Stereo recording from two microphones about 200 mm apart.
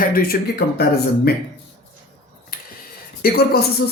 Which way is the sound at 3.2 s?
50° left (ahead or behind).